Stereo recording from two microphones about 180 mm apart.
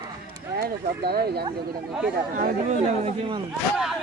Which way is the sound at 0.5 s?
60° right (ahead or behind).